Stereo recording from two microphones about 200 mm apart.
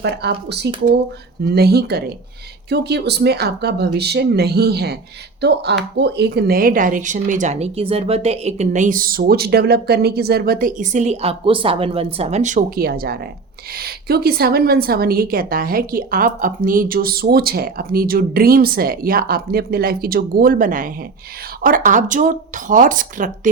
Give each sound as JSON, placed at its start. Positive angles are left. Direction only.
{"t": 0.0, "sound": "a woman's voice", "side_deg": -55}